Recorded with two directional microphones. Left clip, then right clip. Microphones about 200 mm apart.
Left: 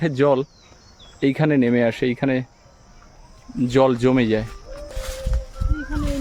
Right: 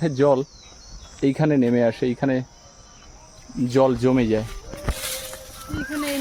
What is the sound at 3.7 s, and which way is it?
Speech, 20° left (ahead or behind).